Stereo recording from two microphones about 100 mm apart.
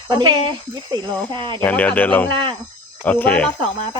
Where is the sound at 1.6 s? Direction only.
15° left (ahead or behind).